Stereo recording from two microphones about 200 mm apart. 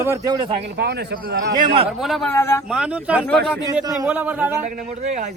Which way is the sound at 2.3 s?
15° left (ahead or behind).